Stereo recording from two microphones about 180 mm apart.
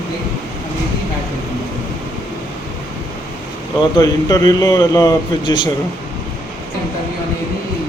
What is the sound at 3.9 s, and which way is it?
A man's voice, 20° left (ahead or behind).